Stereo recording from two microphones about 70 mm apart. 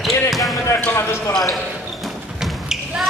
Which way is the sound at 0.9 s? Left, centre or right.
Left.